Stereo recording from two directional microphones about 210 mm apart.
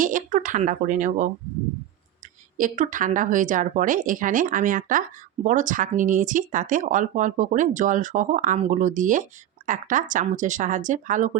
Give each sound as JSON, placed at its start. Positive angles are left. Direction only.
{"t": 0.0, "sound": "speech", "side_deg": -40}
{"t": 2.6, "sound": "speech", "side_deg": -35}